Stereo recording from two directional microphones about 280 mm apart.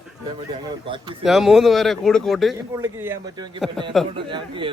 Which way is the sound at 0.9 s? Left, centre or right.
Centre.